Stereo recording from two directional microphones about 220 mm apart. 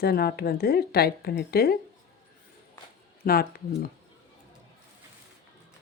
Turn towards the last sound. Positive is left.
turn(degrees=45)  # may be behind; listen again after turning